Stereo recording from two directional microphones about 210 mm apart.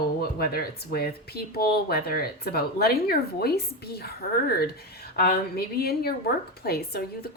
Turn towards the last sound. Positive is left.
turn(degrees=50)  # may be behind; listen again after turning